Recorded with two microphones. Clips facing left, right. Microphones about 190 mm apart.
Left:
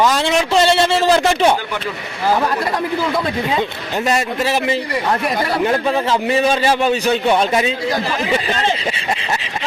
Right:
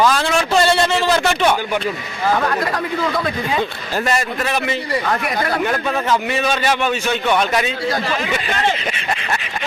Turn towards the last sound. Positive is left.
turn(degrees=30)  # may be behind; listen again after turning